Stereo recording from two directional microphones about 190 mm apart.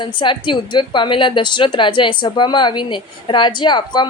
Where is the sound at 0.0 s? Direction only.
25° left (ahead or behind).